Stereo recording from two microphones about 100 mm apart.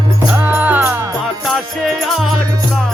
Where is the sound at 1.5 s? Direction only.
Centre (ahead or behind).